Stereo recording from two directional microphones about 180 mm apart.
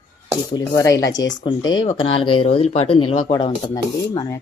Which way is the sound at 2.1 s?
30° left (ahead or behind).